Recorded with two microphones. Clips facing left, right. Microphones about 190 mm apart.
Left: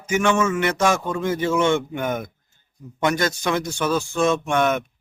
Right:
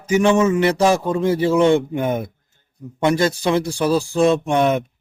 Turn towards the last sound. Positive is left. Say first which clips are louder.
# right 3 dB
turn(degrees=-30)  # may be behind; listen again after turning